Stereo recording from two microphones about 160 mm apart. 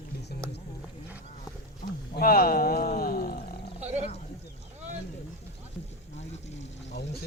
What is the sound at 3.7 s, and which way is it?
Roaring cats, 45° right (ahead or behind).